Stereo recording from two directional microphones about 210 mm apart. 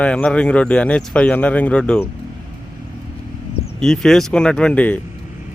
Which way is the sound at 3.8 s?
Centre (ahead or behind).